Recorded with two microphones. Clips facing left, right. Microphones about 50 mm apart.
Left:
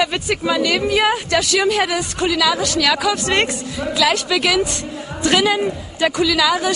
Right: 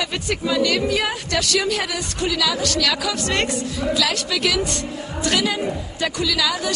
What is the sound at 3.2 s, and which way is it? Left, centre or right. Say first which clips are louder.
Speech: left 4 dB; left.